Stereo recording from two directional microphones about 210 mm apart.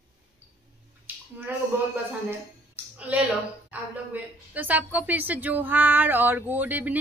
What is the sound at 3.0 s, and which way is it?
A woman's voice, 5° right (ahead or behind).